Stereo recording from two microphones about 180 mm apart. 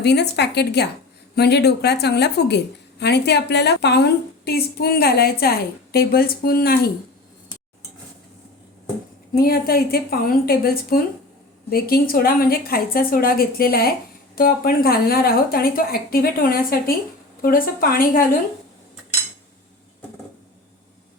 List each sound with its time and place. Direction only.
0.0 s a woman's voice: 70° left (ahead or behind)
9.4 s a woman's voice: 55° left (ahead or behind)